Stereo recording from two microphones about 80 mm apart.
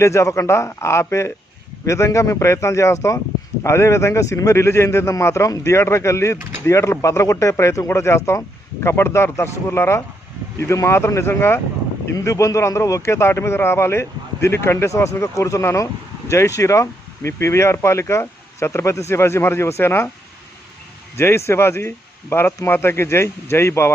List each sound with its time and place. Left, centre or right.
0.0 s a man's voice: left
21.2 s a man's voice: left